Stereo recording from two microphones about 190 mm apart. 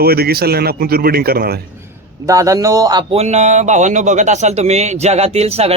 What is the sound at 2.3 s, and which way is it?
Speech, 15° right (ahead or behind).